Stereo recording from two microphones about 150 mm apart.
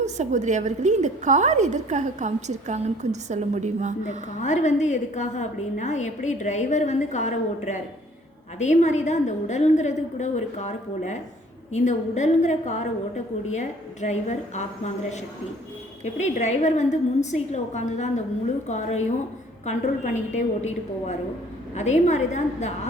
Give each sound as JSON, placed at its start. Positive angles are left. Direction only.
{"t": 0.0, "sound": "a woman's voice", "side_deg": -50}
{"t": 4.4, "sound": "a woman's voice", "side_deg": 50}
{"t": 16.1, "sound": "a woman's voice", "side_deg": 50}
{"t": 20.3, "sound": "a woman's voice", "side_deg": 50}